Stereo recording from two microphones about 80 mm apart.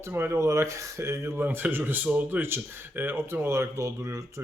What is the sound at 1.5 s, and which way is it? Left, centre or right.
Speech, right.